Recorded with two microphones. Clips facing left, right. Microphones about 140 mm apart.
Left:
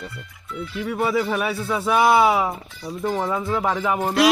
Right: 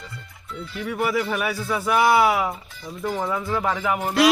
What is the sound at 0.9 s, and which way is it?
Speech, 25° left (ahead or behind).